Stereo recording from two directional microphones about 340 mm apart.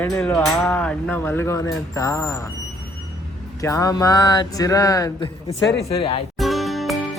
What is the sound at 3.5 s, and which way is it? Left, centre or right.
Speech, centre.